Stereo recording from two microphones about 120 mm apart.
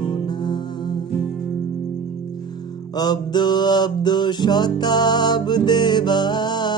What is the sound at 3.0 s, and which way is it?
Music, 35° left (ahead or behind).